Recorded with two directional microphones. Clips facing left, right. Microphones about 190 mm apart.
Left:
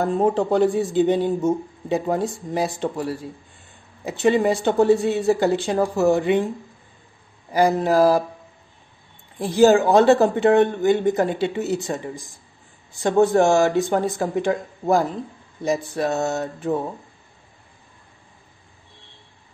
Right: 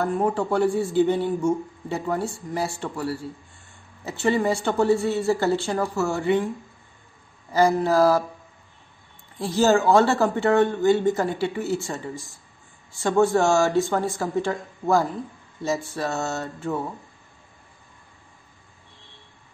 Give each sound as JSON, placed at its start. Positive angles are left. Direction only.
{"t": 0.0, "sound": "speech", "side_deg": 20}
{"t": 7.5, "sound": "speech", "side_deg": 15}
{"t": 9.4, "sound": "speech", "side_deg": 15}